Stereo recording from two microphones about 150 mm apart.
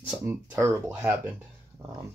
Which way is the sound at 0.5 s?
10° right (ahead or behind).